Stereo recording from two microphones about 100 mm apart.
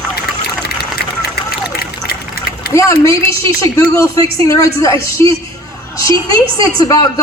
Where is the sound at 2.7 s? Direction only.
30° left (ahead or behind).